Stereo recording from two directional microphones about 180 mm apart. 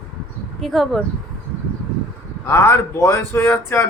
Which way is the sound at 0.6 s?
Centre (ahead or behind).